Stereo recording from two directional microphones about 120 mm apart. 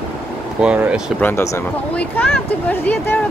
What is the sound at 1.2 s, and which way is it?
Speech, 20° left (ahead or behind).